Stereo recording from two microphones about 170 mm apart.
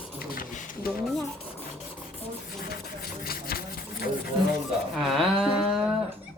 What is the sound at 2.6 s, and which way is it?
Speech, 60° left (ahead or behind).